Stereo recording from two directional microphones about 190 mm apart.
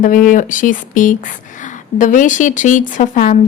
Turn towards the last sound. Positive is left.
turn(degrees=40)  # may be behind; listen again after turning